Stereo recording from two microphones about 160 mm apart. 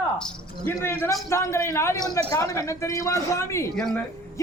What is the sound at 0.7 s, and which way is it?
A man's voice, 15° left (ahead or behind).